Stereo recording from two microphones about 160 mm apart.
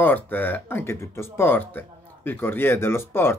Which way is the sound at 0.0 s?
10° left (ahead or behind).